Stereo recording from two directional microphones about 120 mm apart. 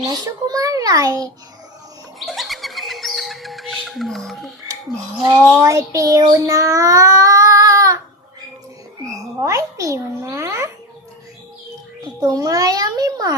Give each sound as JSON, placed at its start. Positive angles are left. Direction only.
{"t": 0.0, "sound": "a child's voice", "side_deg": -35}
{"t": 2.1, "sound": "music", "side_deg": 0}
{"t": 5.5, "sound": "child singing", "side_deg": -25}
{"t": 9.4, "sound": "a child's voice", "side_deg": -25}
{"t": 12.2, "sound": "a child's voice", "side_deg": -30}